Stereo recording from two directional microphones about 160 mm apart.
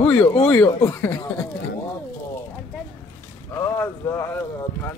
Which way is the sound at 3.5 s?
20° left (ahead or behind).